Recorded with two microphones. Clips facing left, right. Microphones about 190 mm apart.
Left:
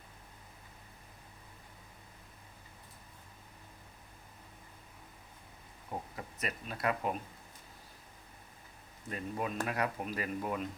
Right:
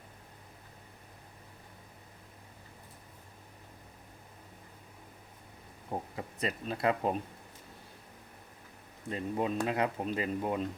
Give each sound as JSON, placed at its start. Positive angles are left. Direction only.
{"t": 5.9, "sound": "speech", "side_deg": -30}
{"t": 9.0, "sound": "speech", "side_deg": -25}